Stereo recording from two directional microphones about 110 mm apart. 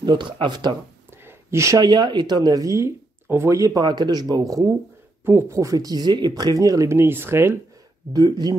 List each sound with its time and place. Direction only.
0.0 s speech: 45° right (ahead or behind)
1.2 s speech: 25° right (ahead or behind)
8.1 s speech: 35° right (ahead or behind)